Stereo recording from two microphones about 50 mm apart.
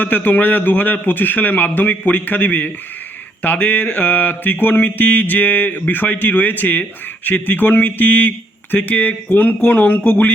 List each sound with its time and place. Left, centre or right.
0.0 s a man's voice: left